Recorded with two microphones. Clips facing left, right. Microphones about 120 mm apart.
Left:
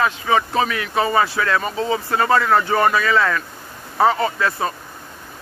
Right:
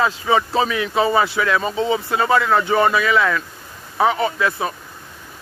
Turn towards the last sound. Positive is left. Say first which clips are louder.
# even
turn(degrees=-10)  # may be behind; listen again after turning